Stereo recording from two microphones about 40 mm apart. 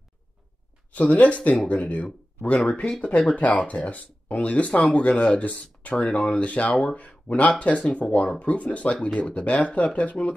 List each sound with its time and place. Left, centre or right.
0.9 s speech: left